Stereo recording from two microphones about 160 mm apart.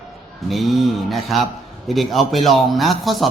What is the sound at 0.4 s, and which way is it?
Speech, centre (ahead or behind).